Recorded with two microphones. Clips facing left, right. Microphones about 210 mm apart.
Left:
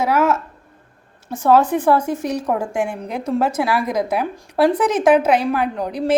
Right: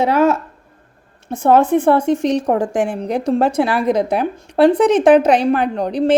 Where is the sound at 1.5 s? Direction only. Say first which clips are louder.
Right 2 dB; 25° right (ahead or behind).